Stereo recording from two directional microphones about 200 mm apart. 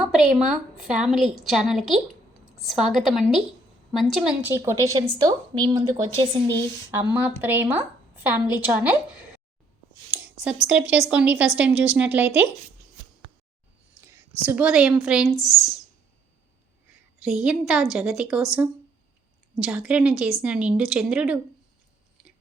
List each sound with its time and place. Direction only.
0.0 s a woman's voice: 5° right (ahead or behind); by 6.2 s 20° right (ahead or behind)
7.1 s a woman's voice: 10° right (ahead or behind)
10.1 s a sound: 10° right (ahead or behind)
10.7 s a woman's voice: 5° right (ahead or behind)
13.9 s a sound: 15° right (ahead or behind)
15.0 s a woman's voice: 5° right (ahead or behind)
17.2 s a woman's voice: 5° right (ahead or behind)
19.5 s a woman's voice: 5° right (ahead or behind)